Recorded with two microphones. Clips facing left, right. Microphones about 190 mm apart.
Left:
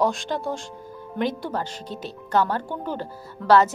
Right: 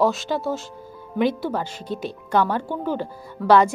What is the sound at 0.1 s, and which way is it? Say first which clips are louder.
Speech: right 3 dB; 5° right (ahead or behind).